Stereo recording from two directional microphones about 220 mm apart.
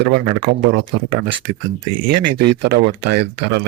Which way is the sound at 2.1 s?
50° right (ahead or behind).